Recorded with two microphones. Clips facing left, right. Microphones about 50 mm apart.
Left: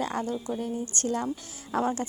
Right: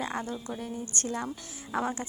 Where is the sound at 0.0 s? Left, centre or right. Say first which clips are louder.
Left 4 dB; right.